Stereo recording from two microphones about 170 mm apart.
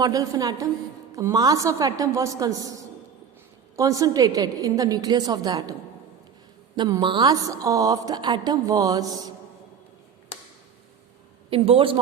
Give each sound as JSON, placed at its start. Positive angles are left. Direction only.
{"t": 0.0, "sound": "a woman's voice", "side_deg": -20}
{"t": 6.7, "sound": "a woman's voice", "side_deg": -25}
{"t": 11.5, "sound": "a man's voice", "side_deg": -35}